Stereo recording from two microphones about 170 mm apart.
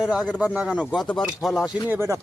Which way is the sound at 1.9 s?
15° right (ahead or behind).